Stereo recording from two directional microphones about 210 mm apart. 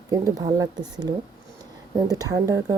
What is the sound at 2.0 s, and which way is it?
Speech, 15° right (ahead or behind).